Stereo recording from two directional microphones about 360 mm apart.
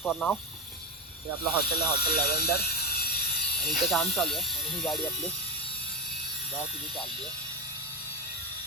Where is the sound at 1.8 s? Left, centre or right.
Left.